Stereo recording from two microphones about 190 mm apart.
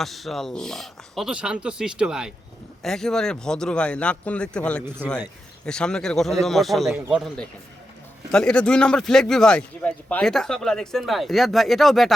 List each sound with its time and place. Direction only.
0.0 s speech: centre (ahead or behind)